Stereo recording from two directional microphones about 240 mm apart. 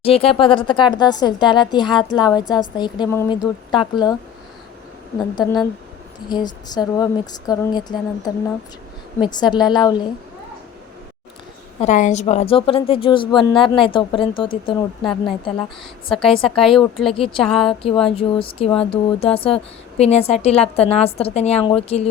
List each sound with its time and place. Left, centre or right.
0.0 s speech: left
5.3 s speech: centre
11.8 s speech: left
16.0 s a woman's voice: centre
17.7 s speech: left